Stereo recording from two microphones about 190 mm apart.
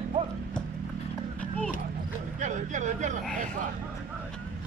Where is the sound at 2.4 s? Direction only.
40° right (ahead or behind).